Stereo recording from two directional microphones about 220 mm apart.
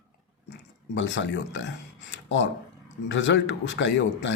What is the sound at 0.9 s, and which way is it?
Speech, 55° left (ahead or behind).